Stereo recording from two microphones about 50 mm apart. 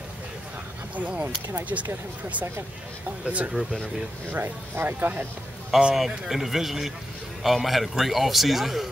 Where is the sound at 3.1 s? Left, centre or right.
Right.